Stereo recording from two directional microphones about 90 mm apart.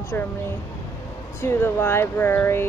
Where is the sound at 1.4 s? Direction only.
25° left (ahead or behind).